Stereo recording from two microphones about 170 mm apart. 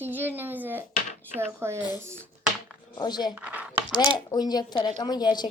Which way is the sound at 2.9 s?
25° left (ahead or behind).